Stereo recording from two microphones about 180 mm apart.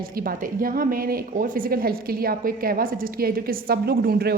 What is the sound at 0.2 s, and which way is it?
A woman's voice, 50° right (ahead or behind).